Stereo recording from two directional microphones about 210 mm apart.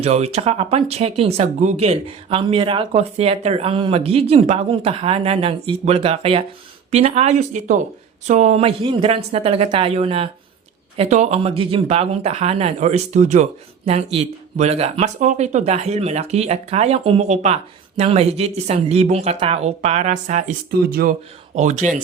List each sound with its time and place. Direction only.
0.0 s speech: 30° right (ahead or behind)